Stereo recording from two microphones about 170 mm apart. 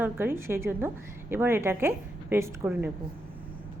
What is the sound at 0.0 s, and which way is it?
A woman's voice, 15° right (ahead or behind).